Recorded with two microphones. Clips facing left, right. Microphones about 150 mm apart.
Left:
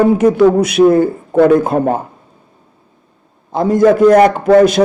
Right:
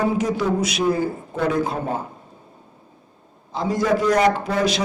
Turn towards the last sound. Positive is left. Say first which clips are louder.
# left 13 dB
turn(degrees=55)  # may be behind; listen again after turning